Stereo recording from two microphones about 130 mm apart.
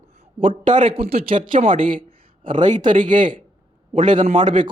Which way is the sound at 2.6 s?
70° right (ahead or behind).